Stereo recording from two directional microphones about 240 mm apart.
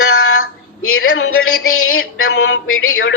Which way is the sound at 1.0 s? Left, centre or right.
Left.